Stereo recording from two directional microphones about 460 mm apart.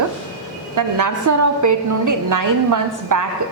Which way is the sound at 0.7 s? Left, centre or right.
Right.